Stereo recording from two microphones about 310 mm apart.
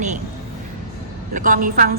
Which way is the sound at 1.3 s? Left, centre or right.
Right.